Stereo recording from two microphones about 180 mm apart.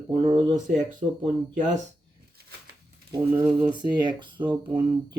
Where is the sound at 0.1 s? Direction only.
25° right (ahead or behind).